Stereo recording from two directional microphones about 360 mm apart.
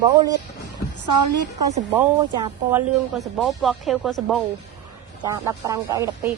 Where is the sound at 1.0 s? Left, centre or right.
Right.